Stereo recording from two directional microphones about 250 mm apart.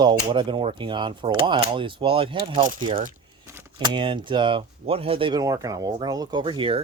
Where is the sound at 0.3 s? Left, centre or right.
Centre.